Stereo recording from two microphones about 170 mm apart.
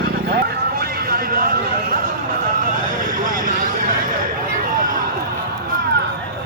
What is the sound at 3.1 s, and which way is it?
Vehicle, 55° right (ahead or behind).